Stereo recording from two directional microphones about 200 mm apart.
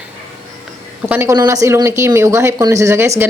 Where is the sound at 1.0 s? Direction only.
15° right (ahead or behind).